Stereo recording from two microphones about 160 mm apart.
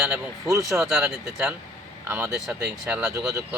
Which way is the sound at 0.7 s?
5° right (ahead or behind).